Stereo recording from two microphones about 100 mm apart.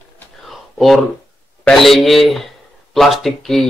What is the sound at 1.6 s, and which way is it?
Speech, centre (ahead or behind).